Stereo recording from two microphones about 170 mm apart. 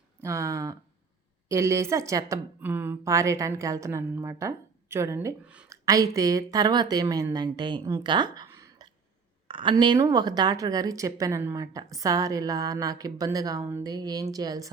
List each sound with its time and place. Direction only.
0.2 s a woman's voice: 15° right (ahead or behind)
8.4 s a sound: 20° right (ahead or behind)
9.5 s a woman's voice: 30° right (ahead or behind)